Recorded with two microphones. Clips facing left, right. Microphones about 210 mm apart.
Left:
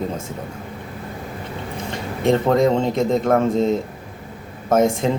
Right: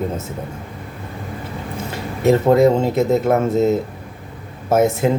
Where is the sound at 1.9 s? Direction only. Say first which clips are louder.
Right 3 dB; 5° right (ahead or behind).